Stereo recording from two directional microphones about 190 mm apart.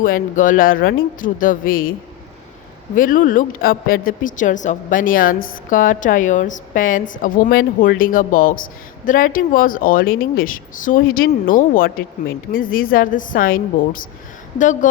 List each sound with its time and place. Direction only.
0.0 s a woman's voice: 45° left (ahead or behind)